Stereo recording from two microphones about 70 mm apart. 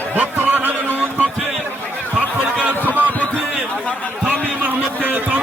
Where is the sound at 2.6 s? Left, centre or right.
Right.